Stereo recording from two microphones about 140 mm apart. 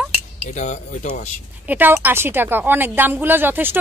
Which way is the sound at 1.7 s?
15° right (ahead or behind).